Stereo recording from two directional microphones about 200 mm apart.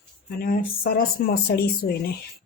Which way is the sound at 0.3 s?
45° left (ahead or behind).